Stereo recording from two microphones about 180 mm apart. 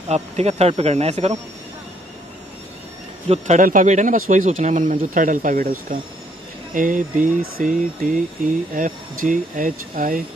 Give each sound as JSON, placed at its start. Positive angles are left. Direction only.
{"t": 0.1, "sound": "speech", "side_deg": -35}
{"t": 3.3, "sound": "speech", "side_deg": -40}